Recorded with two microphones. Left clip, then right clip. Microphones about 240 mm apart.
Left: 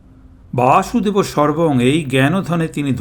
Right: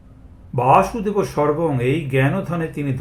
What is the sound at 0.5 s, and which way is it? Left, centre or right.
Speech, left.